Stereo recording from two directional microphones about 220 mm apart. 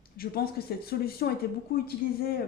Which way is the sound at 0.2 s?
45° left (ahead or behind).